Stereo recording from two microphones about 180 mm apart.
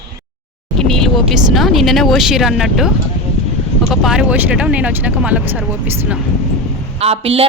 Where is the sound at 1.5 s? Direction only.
Centre (ahead or behind).